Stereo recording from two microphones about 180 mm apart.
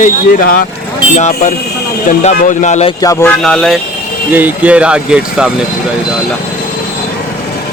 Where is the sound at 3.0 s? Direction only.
15° left (ahead or behind).